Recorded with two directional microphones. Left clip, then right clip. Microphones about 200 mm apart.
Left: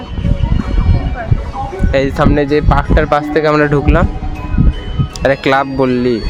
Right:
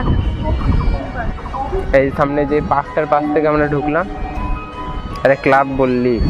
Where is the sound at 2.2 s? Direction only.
45° left (ahead or behind).